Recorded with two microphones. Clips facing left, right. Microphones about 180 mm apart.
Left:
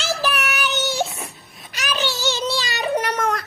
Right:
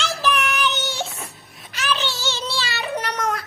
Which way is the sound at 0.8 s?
40° left (ahead or behind).